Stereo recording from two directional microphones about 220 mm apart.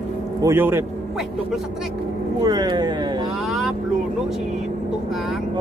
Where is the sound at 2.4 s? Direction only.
20° right (ahead or behind).